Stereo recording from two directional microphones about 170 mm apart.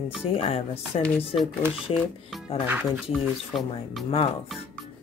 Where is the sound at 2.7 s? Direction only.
5° right (ahead or behind).